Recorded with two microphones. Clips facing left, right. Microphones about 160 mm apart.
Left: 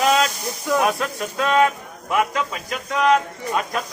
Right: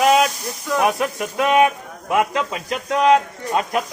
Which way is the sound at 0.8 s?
15° right (ahead or behind).